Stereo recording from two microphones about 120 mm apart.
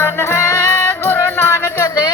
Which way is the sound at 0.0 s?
20° left (ahead or behind).